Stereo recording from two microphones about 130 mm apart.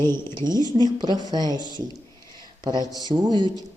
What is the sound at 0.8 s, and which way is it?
Speech, 30° right (ahead or behind).